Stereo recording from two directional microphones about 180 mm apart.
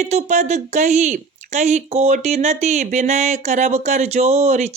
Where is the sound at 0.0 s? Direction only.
40° right (ahead or behind).